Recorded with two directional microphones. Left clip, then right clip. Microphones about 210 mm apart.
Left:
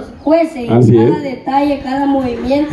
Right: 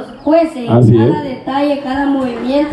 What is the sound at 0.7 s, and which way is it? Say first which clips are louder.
Speech: left 2 dB; 5° left (ahead or behind).